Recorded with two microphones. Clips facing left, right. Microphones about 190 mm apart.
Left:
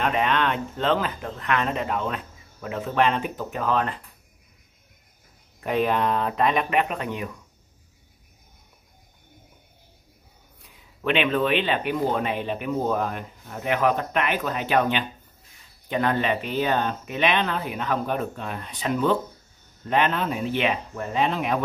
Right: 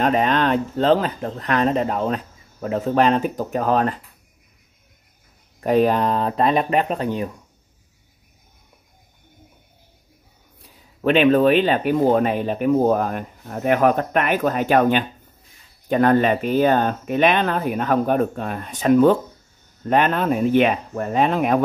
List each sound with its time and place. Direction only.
0.0 s speech: 35° right (ahead or behind)
5.6 s speech: 40° right (ahead or behind)
10.6 s speech: 40° right (ahead or behind)